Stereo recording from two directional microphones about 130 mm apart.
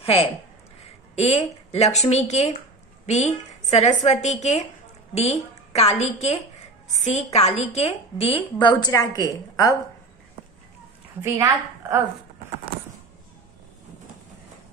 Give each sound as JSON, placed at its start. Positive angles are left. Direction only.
{"t": 0.0, "sound": "a woman's voice", "side_deg": 45}
{"t": 7.3, "sound": "a woman's voice", "side_deg": 55}
{"t": 11.3, "sound": "a woman's voice", "side_deg": -20}